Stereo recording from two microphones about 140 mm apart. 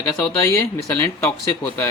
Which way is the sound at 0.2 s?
20° left (ahead or behind).